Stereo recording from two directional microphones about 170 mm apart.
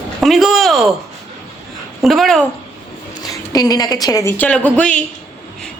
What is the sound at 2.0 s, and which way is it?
Speech, centre (ahead or behind).